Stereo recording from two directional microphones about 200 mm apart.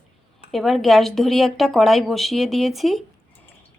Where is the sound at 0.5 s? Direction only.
Centre (ahead or behind).